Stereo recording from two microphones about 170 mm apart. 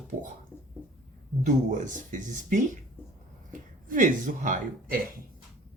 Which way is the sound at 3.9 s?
50° right (ahead or behind).